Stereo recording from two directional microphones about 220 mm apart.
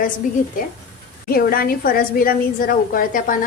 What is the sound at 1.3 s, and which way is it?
A woman's voice, 40° left (ahead or behind).